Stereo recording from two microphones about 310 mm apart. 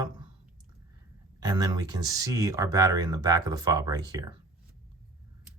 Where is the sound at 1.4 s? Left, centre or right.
Centre.